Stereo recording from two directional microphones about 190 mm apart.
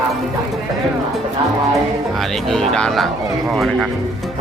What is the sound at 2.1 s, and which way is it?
Speech, centre (ahead or behind).